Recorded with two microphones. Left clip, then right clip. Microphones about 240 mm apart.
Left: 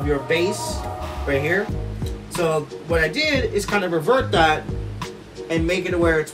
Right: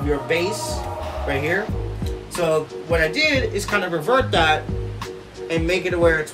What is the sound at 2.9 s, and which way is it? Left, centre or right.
Speech, centre.